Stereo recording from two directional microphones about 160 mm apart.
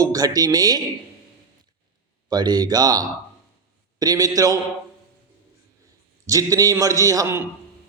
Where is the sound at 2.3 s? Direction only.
25° right (ahead or behind).